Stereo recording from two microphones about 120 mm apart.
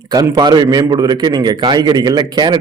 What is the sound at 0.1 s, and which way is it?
A man's voice, 35° right (ahead or behind).